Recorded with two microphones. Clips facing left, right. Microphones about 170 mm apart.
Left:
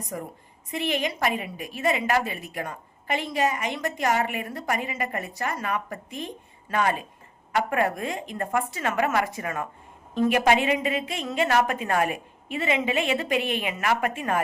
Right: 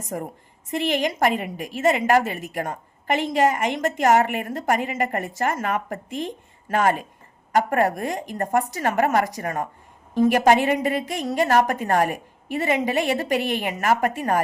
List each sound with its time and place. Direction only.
0.1 s a woman's voice: 50° right (ahead or behind)